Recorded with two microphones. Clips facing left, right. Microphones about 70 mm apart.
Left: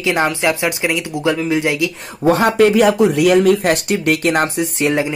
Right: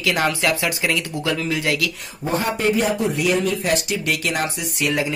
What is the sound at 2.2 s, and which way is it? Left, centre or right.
Speech, left.